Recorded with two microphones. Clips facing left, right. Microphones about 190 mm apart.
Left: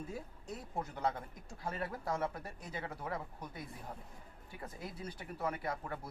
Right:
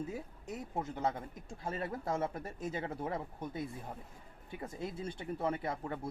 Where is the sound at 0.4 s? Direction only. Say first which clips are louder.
Right 3 dB; 20° right (ahead or behind).